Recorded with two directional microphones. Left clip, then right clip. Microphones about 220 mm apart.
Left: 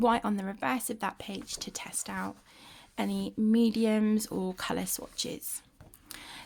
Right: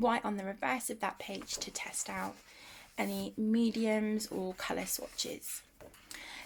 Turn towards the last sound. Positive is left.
turn(degrees=35)  # may be behind; listen again after turning